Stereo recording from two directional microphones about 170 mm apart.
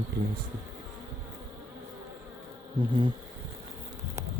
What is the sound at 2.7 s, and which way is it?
Speech, 25° right (ahead or behind).